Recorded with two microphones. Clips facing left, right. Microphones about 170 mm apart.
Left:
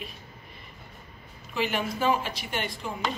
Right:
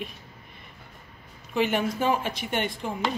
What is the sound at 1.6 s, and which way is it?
Speech, 55° right (ahead or behind).